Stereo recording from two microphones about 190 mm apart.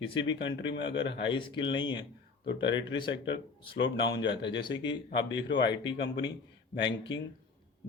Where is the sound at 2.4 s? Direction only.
70° left (ahead or behind).